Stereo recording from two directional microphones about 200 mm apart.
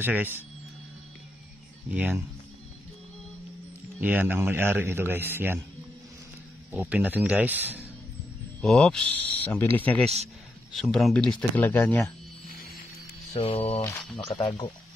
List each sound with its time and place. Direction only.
0.0 s a man's voice: 10° right (ahead or behind)
1.9 s a man's voice: 10° right (ahead or behind)
4.0 s a man's voice: 10° right (ahead or behind)
6.7 s a man's voice: 10° right (ahead or behind)
8.5 s speech: 5° left (ahead or behind)
13.4 s speech: 30° left (ahead or behind)
13.7 s speech: 10° left (ahead or behind)
14.1 s speech: 25° left (ahead or behind)